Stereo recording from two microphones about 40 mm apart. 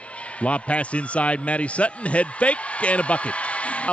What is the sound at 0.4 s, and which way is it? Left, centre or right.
Speech, left.